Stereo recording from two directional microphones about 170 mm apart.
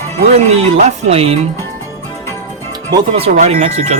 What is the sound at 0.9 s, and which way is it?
Speech, 35° right (ahead or behind).